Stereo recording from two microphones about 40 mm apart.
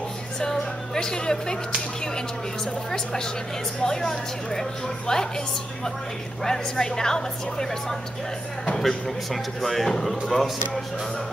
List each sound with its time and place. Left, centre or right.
0.4 s music: centre
2.6 s a woman's voice: centre
6.4 s a woman's voice: centre
9.3 s speech: centre